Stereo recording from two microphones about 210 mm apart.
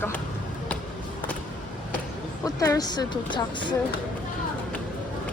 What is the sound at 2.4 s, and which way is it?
Speech, 15° left (ahead or behind).